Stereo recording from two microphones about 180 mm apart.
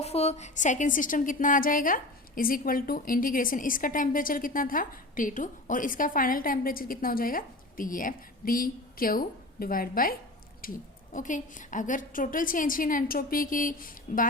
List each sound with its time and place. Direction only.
0.0 s a woman's voice: 35° left (ahead or behind)